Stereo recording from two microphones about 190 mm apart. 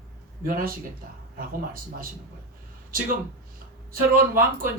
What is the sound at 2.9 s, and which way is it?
Speech, 45° right (ahead or behind).